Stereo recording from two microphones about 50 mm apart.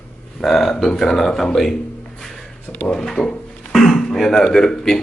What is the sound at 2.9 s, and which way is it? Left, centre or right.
Speech, centre.